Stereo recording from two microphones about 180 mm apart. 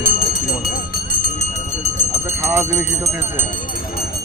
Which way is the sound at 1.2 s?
40° left (ahead or behind).